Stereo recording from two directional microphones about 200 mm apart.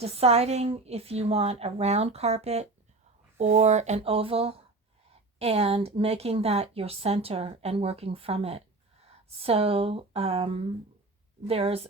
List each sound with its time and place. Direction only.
0.0 s a woman's voice: 30° right (ahead or behind)